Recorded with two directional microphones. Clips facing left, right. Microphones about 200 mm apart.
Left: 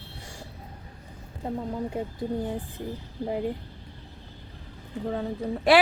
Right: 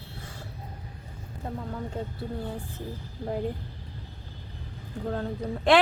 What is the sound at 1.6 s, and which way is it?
Speech, 20° left (ahead or behind).